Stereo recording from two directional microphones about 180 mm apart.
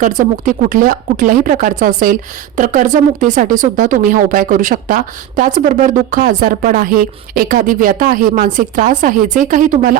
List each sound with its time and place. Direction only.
0.0 s a woman's voice: 45° right (ahead or behind)